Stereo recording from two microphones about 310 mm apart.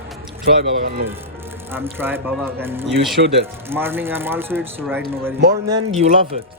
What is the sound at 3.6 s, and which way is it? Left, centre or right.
Speech, centre.